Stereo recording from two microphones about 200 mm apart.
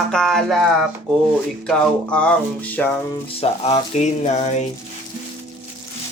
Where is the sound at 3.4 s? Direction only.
30° left (ahead or behind).